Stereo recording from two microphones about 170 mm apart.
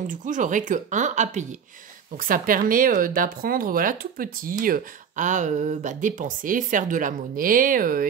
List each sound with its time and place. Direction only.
0.0 s speech: 50° right (ahead or behind)
2.1 s speech: 55° right (ahead or behind)